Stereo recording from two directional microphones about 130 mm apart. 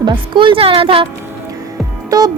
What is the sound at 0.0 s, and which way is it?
Speech, 40° right (ahead or behind).